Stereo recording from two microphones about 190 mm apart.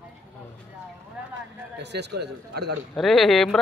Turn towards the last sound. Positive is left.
turn(degrees=0)  # may be behind; listen again after turning